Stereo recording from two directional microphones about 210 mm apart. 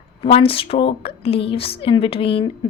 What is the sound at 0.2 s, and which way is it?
Speech, 25° left (ahead or behind).